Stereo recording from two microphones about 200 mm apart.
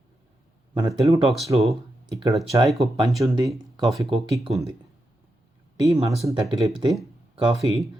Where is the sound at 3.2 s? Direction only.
15° right (ahead or behind).